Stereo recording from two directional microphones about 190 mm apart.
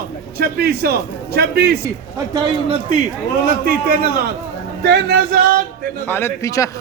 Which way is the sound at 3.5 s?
50° right (ahead or behind).